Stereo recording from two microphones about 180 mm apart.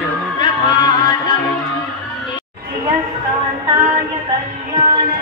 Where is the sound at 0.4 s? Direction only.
25° left (ahead or behind).